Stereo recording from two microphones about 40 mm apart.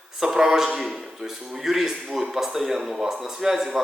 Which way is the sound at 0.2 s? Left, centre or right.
Centre.